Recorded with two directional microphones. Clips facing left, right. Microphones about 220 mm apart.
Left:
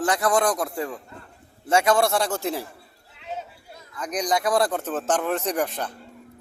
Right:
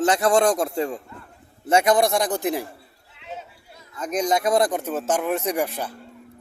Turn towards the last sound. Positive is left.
turn(degrees=-10)  # may be behind; listen again after turning